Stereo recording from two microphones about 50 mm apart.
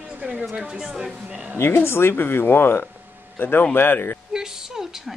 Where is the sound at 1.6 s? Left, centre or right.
Left.